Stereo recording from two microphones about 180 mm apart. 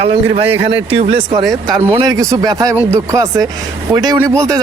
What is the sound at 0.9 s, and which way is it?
A man's voice, 30° right (ahead or behind).